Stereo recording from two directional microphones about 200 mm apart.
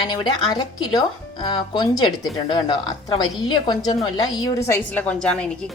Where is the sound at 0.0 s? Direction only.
20° left (ahead or behind).